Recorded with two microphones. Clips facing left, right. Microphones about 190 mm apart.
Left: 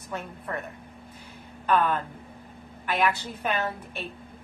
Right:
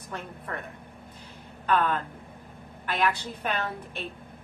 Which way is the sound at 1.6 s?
5° left (ahead or behind).